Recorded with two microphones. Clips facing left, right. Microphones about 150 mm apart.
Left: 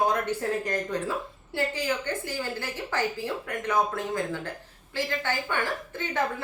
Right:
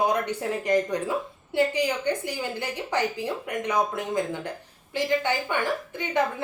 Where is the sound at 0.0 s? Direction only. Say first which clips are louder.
Right 1 dB; 15° right (ahead or behind).